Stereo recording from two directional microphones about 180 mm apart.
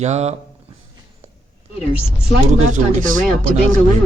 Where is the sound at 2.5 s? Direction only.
45° right (ahead or behind).